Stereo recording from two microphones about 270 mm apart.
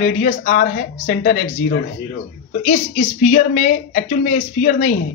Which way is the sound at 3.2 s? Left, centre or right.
Left.